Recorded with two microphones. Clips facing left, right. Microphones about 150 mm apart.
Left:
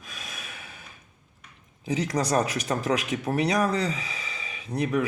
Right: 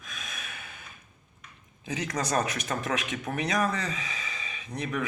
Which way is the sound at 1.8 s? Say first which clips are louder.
Left 5 dB; 35° left (ahead or behind).